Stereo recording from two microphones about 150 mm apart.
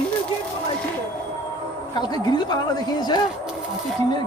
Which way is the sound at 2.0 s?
30° left (ahead or behind).